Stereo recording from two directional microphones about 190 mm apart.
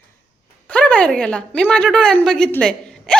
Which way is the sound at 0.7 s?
5° left (ahead or behind).